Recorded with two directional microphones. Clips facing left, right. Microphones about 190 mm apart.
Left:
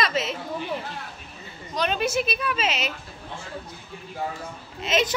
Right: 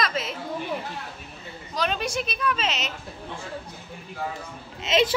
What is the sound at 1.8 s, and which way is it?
A woman's voice, centre (ahead or behind).